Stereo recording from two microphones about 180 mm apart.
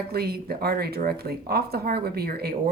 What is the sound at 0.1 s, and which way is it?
Speech, 60° right (ahead or behind).